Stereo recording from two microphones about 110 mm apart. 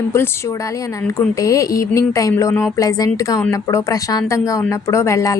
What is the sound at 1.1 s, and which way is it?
Speech, 30° left (ahead or behind).